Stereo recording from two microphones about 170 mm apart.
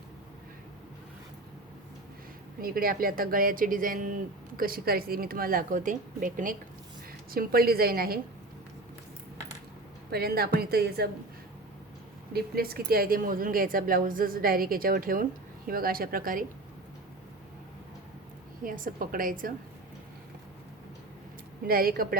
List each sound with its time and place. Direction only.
2.6 s speech: 60° right (ahead or behind)
7.3 s speech: 60° right (ahead or behind)
10.1 s speech: 65° right (ahead or behind)
12.3 s speech: 65° right (ahead or behind)
18.6 s a woman's voice: 55° right (ahead or behind)
21.7 s speech: 60° right (ahead or behind)